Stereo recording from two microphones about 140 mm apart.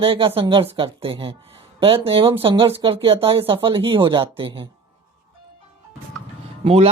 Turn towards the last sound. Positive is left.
turn(degrees=-45)  # may be behind; listen again after turning